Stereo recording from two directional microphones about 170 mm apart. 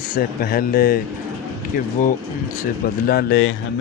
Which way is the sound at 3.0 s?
70° left (ahead or behind).